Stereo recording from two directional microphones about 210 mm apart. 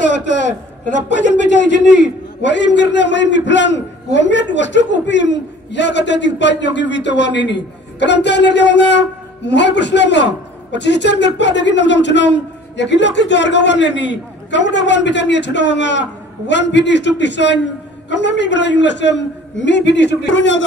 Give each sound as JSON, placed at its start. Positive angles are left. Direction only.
{"t": 0.0, "sound": "a man's voice", "side_deg": 55}